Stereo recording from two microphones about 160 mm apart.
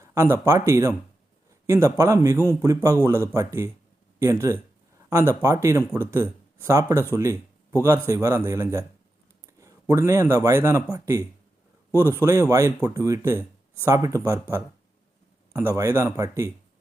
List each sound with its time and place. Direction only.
0.0 s a man's voice: 15° right (ahead or behind)
11.9 s a man's voice: 15° left (ahead or behind)
12.2 s speech: 20° right (ahead or behind)
15.5 s speech: 15° right (ahead or behind)